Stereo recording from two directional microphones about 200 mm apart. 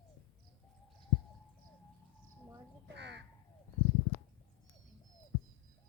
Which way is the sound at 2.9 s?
60° right (ahead or behind).